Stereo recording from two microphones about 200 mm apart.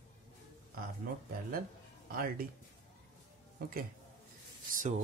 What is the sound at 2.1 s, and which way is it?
Speech, 45° right (ahead or behind).